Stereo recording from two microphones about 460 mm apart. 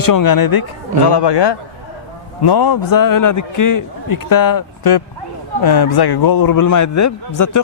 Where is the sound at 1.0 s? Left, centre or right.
Left.